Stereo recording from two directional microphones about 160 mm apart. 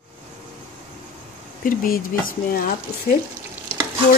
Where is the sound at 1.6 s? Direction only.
65° left (ahead or behind).